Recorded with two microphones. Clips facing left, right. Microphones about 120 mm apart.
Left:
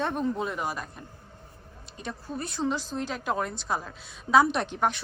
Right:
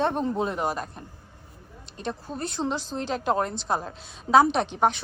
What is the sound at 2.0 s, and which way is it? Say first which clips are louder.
A woman's voice: right 3 dB; 25° right (ahead or behind).